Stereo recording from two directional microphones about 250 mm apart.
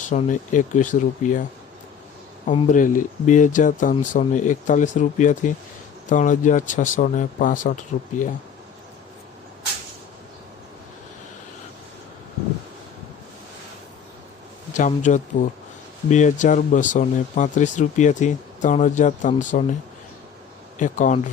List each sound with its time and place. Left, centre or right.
0.1 s speech: left
2.5 s speech: left
14.7 s speech: left
20.7 s speech: left